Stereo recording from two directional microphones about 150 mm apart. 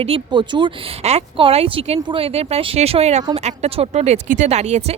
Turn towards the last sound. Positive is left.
turn(degrees=-50)  # may be behind; listen again after turning